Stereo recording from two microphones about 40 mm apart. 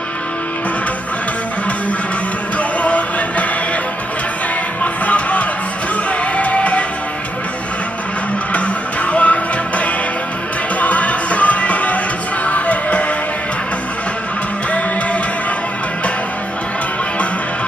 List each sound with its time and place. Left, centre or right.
2.8 s music: left
5.0 s music: left
8.5 s music: left